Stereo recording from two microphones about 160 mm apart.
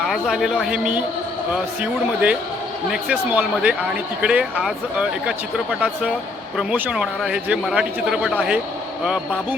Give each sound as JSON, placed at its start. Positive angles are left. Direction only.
{"t": 0.0, "sound": "a man's voice", "side_deg": -5}